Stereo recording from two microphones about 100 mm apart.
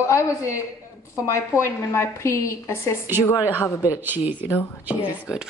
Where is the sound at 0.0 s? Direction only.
30° left (ahead or behind).